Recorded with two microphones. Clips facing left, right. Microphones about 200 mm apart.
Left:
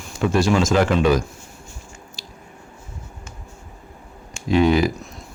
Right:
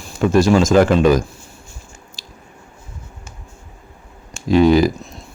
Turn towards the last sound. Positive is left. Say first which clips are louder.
# right 4 dB
turn(degrees=-40)  # may be behind; listen again after turning